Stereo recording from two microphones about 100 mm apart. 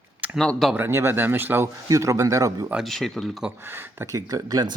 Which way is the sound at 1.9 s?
30° right (ahead or behind).